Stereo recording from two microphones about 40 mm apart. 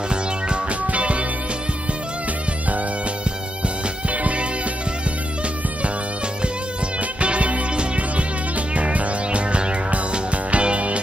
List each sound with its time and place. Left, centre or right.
0.1 s music: right
4.1 s music: right
7.0 s music: right